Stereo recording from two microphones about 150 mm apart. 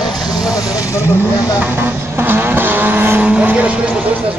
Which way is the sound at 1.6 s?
10° right (ahead or behind).